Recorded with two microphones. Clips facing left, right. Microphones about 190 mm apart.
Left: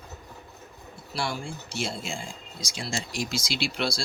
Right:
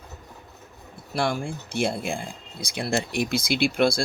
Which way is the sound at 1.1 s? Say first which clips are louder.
Right 6 dB; 55° right (ahead or behind).